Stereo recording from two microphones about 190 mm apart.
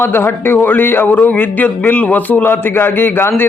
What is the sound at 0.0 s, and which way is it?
Speech, 10° left (ahead or behind).